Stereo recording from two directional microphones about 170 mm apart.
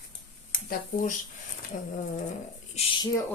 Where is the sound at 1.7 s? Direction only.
55° left (ahead or behind).